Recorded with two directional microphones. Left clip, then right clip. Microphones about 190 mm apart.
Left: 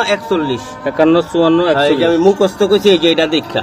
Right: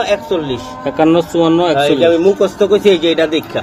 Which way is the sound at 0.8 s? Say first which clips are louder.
Even; 15° right (ahead or behind).